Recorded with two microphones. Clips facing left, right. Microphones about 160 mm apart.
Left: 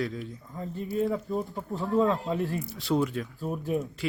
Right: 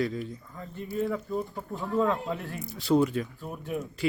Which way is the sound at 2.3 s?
35° left (ahead or behind).